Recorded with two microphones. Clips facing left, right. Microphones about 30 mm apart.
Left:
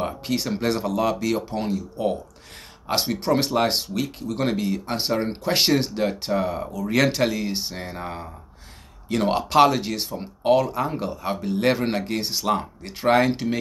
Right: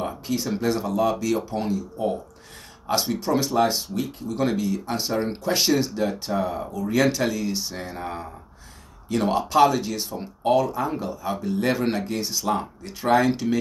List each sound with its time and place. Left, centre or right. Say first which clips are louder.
0.0 s a sound: left 1 dB; left
0.6 s speech: right 1 dB; left
1.7 s speech: left 2 dB; left
2.9 s speech: left 1 dB; left
4.4 s speech: right 1 dB; left
7.9 s speech: right 1 dB; centre
9.1 s speech: left 1 dB; left